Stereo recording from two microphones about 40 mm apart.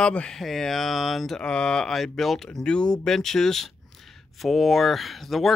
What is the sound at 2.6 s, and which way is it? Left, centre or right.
Speech, left.